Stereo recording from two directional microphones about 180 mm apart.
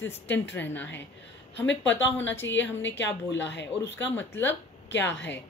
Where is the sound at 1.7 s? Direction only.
90° left.